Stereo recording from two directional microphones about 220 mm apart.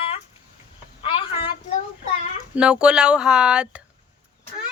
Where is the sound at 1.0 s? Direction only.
25° left (ahead or behind).